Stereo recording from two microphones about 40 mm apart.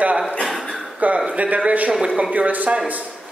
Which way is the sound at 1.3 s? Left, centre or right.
Right.